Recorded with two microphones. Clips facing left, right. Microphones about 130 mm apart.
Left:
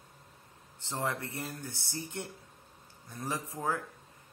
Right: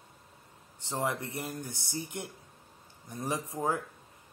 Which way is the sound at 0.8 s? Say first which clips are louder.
Right 2 dB; 20° right (ahead or behind).